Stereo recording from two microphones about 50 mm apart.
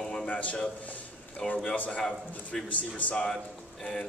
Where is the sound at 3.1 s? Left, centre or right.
Centre.